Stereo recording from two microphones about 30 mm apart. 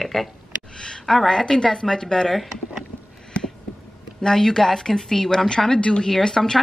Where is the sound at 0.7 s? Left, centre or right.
Left.